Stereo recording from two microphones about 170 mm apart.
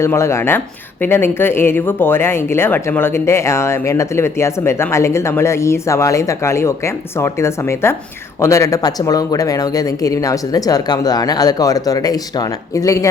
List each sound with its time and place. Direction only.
0.0 s speech: 15° left (ahead or behind)